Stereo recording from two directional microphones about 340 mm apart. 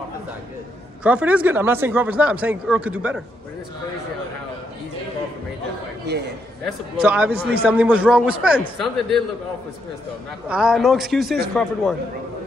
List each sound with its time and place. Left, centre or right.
1.0 s speech: centre
6.0 s a man's voice: right
6.6 s speech: centre
10.5 s speech: centre